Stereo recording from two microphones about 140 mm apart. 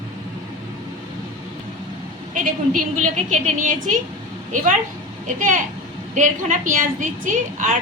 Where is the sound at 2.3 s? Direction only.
70° right (ahead or behind).